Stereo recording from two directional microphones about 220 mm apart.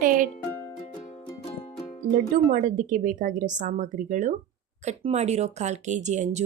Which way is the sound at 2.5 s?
35° right (ahead or behind).